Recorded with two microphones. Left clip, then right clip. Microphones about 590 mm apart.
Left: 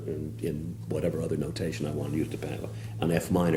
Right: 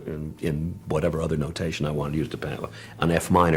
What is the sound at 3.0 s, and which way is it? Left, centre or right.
Speech, right.